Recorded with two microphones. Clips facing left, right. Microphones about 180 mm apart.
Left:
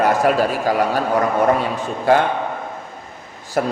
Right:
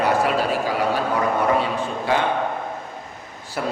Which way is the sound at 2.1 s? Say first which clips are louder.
Left 7 dB; 45° left (ahead or behind).